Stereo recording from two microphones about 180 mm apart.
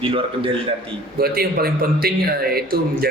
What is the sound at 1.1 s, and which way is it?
Speech, 60° right (ahead or behind).